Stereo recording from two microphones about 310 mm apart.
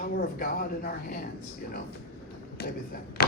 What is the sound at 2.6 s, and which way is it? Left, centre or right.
Speech, left.